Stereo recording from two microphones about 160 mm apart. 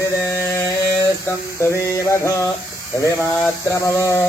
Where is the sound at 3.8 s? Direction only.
20° left (ahead or behind).